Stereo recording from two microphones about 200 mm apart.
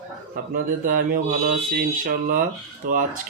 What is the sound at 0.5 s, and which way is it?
Speech, 45° right (ahead or behind).